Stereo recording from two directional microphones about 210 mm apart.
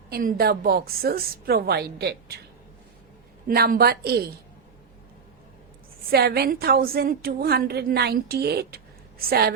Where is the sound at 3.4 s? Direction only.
45° right (ahead or behind).